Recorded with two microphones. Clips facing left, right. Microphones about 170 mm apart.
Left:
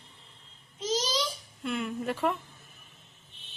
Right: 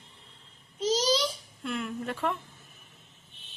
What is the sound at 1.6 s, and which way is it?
Speech, centre (ahead or behind).